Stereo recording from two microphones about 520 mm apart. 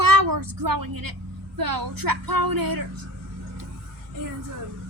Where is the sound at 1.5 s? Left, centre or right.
Right.